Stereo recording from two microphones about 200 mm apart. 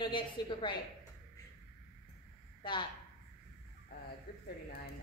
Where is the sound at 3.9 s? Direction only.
55° left (ahead or behind).